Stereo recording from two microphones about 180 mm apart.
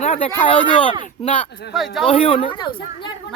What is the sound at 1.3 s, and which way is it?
Speech, 5° left (ahead or behind).